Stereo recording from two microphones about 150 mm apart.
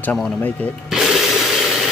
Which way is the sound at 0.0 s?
10° left (ahead or behind).